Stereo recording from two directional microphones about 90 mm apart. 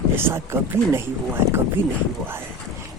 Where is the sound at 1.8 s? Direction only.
25° right (ahead or behind).